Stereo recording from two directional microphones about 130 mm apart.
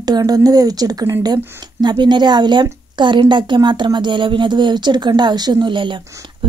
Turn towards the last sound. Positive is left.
turn(degrees=-40)  # may be behind; listen again after turning